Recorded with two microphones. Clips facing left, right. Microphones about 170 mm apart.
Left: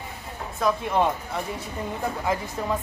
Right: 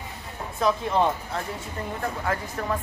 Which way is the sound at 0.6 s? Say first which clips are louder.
Even; 5° left (ahead or behind).